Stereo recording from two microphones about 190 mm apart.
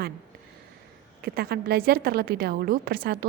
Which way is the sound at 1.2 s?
55° right (ahead or behind).